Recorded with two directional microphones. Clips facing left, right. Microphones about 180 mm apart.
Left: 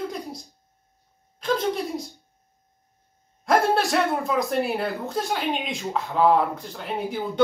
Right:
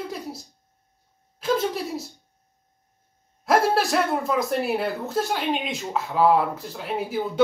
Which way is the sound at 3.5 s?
Centre (ahead or behind).